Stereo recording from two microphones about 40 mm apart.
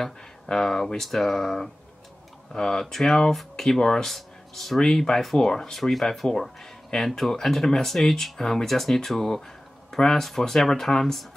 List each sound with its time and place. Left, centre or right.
0.0 s speech: centre